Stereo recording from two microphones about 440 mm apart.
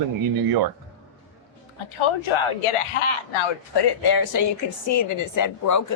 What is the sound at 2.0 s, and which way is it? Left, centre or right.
Speech, left.